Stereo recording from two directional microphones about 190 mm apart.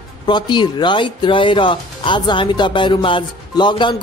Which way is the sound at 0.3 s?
25° left (ahead or behind).